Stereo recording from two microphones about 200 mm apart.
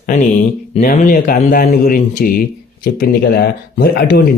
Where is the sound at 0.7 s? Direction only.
40° left (ahead or behind).